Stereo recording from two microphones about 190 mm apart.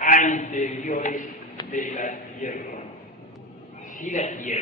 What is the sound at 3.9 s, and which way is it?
Speech, 40° left (ahead or behind).